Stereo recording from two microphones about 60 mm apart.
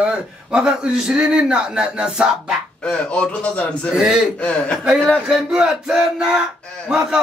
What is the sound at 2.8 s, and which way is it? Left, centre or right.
A man's voice, centre.